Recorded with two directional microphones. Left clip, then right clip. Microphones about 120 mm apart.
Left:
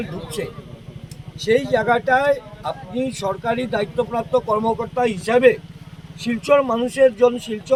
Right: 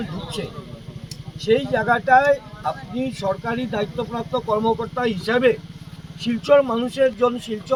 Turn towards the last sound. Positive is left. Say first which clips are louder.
# left 4 dB
turn(degrees=25)  # may be behind; listen again after turning